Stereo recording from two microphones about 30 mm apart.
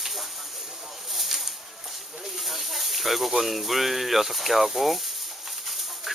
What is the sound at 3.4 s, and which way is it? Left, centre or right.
Speech, centre.